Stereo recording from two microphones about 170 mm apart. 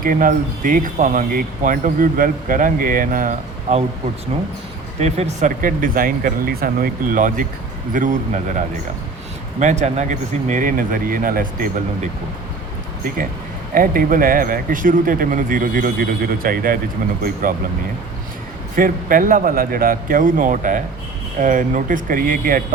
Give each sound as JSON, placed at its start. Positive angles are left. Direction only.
{"t": 0.0, "sound": "speech", "side_deg": -50}
{"t": 4.9, "sound": "speech", "side_deg": -40}
{"t": 9.6, "sound": "speech", "side_deg": -45}
{"t": 13.7, "sound": "speech", "side_deg": -55}
{"t": 18.8, "sound": "speech", "side_deg": -55}